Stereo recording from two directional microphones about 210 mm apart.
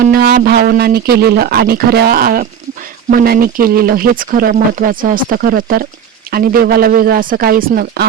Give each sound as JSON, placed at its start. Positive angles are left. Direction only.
{"t": 0.1, "sound": "speech", "side_deg": -45}